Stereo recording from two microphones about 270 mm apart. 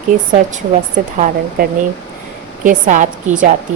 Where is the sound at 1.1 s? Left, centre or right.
Right.